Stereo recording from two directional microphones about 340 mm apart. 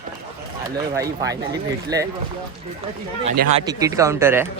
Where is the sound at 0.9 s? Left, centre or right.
Centre.